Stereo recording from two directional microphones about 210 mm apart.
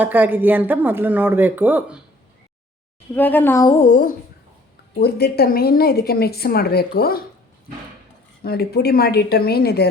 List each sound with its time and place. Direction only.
0.0 s speech: 10° right (ahead or behind)
3.2 s speech: 10° left (ahead or behind)
3.8 s speech: 40° left (ahead or behind)
8.4 s speech: 50° left (ahead or behind)